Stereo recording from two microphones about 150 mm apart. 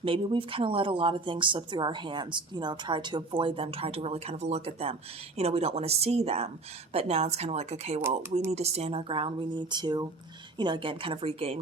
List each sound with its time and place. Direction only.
0.0 s speech: 35° right (ahead or behind)